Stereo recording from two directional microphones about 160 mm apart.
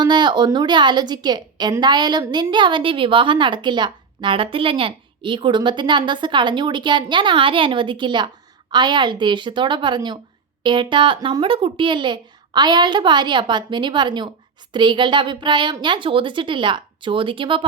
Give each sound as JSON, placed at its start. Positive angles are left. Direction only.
{"t": 0.0, "sound": "a woman's voice", "side_deg": -30}